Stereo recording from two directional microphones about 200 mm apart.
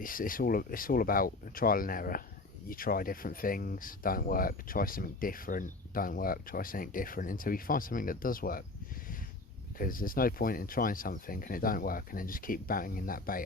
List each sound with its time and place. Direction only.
0.0 s speech: 45° left (ahead or behind)
9.7 s speech: 45° left (ahead or behind)